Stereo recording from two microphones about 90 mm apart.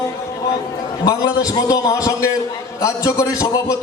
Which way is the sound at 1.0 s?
45° left (ahead or behind).